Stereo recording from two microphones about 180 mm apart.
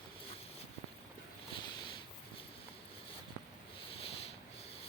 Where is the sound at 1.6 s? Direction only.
25° left (ahead or behind).